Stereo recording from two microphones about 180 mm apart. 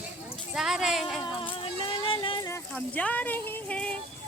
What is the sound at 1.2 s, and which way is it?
Music, 30° left (ahead or behind).